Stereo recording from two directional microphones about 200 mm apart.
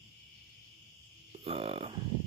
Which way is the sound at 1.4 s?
30° right (ahead or behind).